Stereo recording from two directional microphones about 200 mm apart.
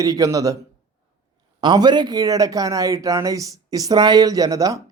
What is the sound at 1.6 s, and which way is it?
Speech, 20° right (ahead or behind).